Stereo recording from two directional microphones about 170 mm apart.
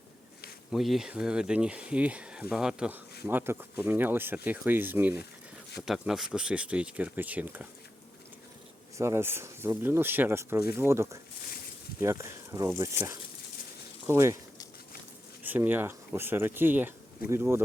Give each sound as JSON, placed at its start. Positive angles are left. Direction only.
{"t": 0.7, "sound": "speech", "side_deg": 0}
{"t": 9.0, "sound": "speech", "side_deg": -15}
{"t": 14.1, "sound": "speech", "side_deg": -15}
{"t": 15.4, "sound": "speech", "side_deg": -10}